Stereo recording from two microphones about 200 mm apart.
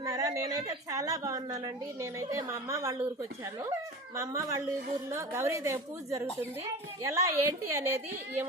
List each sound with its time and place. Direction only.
0.0 s a woman's voice: 15° right (ahead or behind)
4.1 s a woman's voice: 15° right (ahead or behind)